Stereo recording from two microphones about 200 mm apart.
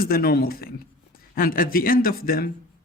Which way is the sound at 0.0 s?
50° left (ahead or behind).